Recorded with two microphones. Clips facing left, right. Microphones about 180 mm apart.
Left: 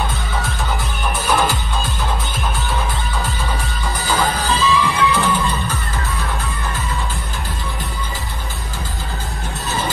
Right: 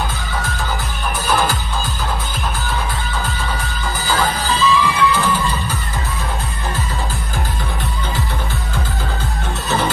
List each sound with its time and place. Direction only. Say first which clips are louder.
3.6 s music: even; centre (ahead or behind)